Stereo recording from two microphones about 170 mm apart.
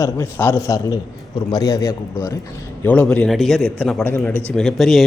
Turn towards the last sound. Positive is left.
turn(degrees=0)  # may be behind; listen again after turning